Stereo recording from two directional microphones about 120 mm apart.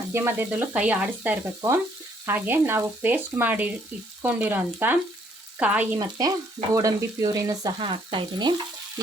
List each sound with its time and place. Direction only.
0.1 s speech: 20° right (ahead or behind)
6.0 s speech: 30° right (ahead or behind)
7.8 s frying: 45° right (ahead or behind)